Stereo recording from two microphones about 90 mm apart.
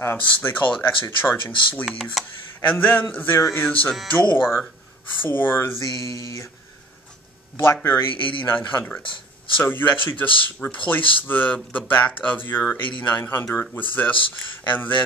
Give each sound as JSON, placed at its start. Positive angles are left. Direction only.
{"t": 0.0, "sound": "speech", "side_deg": 25}
{"t": 1.9, "sound": "speech", "side_deg": 0}
{"t": 2.6, "sound": "speech", "side_deg": 20}
{"t": 4.4, "sound": "speech", "side_deg": -5}
{"t": 5.2, "sound": "speech", "side_deg": 20}
{"t": 6.0, "sound": "mantra", "side_deg": 40}
{"t": 7.6, "sound": "speech", "side_deg": 25}
{"t": 8.1, "sound": "a man's voice", "side_deg": 70}
{"t": 8.5, "sound": "speech", "side_deg": 20}